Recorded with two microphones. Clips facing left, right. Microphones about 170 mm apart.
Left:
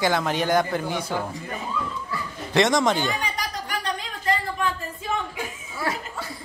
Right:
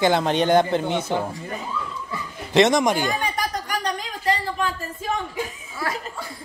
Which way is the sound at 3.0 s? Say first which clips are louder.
Right 3 dB; 40° right (ahead or behind).